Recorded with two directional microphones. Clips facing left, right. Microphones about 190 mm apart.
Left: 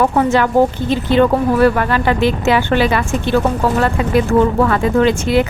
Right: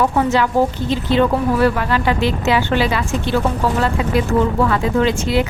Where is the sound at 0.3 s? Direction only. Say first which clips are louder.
Left 3 dB; 55° left (ahead or behind).